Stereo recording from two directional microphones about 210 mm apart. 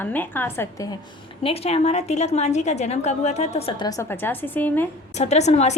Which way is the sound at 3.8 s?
10° left (ahead or behind).